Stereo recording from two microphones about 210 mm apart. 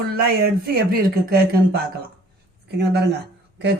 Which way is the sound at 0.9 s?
45° right (ahead or behind).